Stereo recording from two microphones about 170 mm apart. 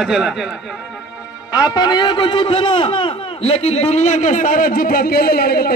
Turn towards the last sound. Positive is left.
turn(degrees=65)  # may be behind; listen again after turning